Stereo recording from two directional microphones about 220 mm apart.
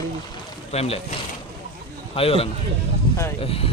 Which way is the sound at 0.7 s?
25° left (ahead or behind).